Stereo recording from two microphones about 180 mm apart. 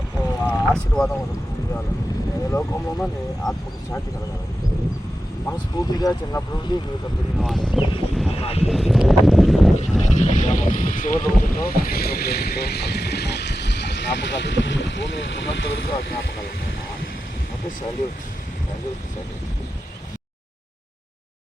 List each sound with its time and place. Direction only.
0.4 s boat: 5° left (ahead or behind)
2.5 s speech: 10° left (ahead or behind)
5.5 s speech: 20° left (ahead or behind)
7.3 s a sound: centre (ahead or behind)
8.4 s speech: 35° left (ahead or behind)
8.6 s a sound: centre (ahead or behind)
10.0 s speech: 40° left (ahead or behind); by 15.9 s 80° left